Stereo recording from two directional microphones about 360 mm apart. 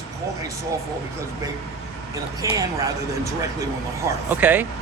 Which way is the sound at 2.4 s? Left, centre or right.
Centre.